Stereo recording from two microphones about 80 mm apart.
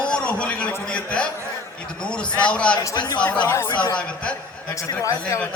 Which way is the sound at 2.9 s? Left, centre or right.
Left.